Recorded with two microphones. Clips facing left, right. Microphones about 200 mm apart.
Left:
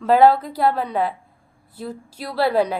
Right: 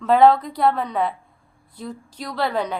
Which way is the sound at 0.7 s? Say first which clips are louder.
Left 1 dB; 30° left (ahead or behind).